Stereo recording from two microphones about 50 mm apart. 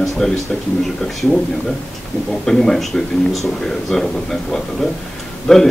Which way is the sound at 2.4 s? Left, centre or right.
Centre.